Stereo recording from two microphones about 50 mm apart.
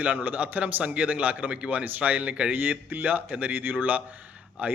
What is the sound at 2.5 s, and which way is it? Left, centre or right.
A man's voice, right.